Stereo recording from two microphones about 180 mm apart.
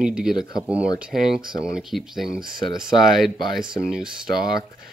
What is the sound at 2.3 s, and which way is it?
Speech, 50° right (ahead or behind).